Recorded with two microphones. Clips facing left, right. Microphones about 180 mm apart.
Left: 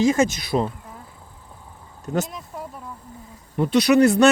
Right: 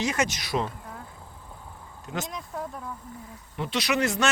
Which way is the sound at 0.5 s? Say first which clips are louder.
Left 6 dB; 35° left (ahead or behind).